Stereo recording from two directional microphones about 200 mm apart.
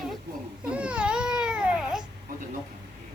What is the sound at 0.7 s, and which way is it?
Speech, 5° right (ahead or behind).